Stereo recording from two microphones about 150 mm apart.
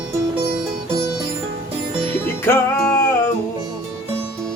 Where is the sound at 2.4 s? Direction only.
20° left (ahead or behind).